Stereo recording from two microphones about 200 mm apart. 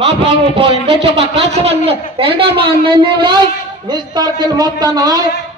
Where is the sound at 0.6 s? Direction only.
25° right (ahead or behind).